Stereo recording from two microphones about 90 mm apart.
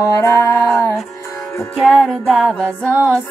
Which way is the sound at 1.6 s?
Centre (ahead or behind).